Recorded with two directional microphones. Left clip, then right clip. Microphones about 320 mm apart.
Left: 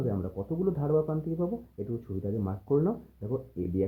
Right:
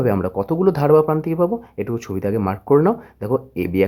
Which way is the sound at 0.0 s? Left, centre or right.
Right.